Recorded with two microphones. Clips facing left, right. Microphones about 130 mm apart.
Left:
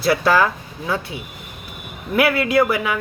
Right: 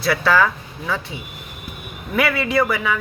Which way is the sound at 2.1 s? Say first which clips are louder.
Left 3 dB; 10° left (ahead or behind).